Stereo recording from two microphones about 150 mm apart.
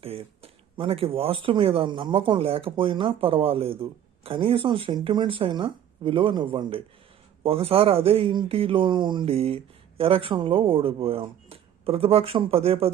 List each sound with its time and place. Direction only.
0.0 s speech: 40° right (ahead or behind)